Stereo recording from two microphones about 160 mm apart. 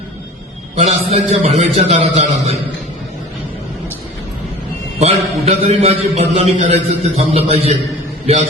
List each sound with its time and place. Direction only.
0.8 s a man's voice: 40° right (ahead or behind)
4.9 s a man's voice: 40° right (ahead or behind)